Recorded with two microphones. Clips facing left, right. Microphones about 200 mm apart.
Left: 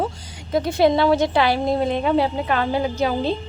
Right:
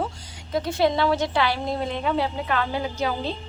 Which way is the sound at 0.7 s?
15° left (ahead or behind).